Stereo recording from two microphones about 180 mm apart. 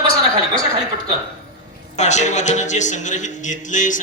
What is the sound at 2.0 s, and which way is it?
A man's voice, 40° left (ahead or behind).